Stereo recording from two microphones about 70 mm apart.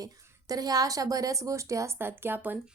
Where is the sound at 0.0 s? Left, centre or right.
Right.